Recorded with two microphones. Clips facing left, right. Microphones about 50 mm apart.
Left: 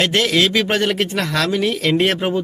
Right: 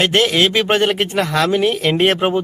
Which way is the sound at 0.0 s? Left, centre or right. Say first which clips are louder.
Right 2 dB; right.